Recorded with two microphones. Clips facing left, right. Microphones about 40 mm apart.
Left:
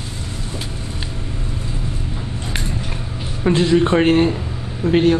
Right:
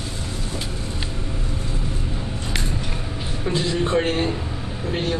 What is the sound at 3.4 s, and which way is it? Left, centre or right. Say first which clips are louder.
Speech: left 8 dB; left.